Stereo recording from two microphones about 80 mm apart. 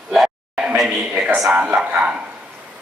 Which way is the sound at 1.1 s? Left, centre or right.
Centre.